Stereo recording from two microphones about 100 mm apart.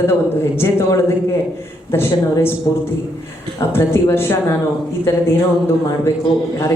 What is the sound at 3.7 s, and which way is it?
Speech, 25° left (ahead or behind).